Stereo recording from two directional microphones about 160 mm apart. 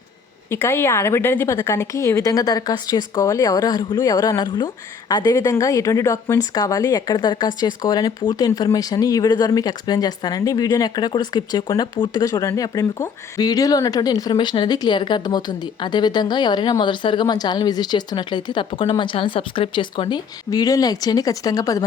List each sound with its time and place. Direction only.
0.5 s speech: 15° left (ahead or behind)